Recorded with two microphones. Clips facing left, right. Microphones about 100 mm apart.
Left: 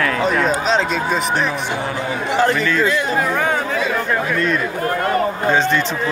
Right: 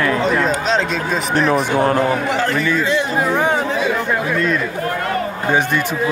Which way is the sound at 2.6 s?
20° right (ahead or behind).